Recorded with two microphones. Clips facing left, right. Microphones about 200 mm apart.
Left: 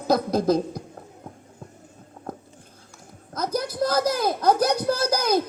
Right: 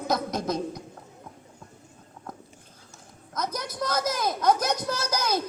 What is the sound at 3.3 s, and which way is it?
Speech, 30° left (ahead or behind).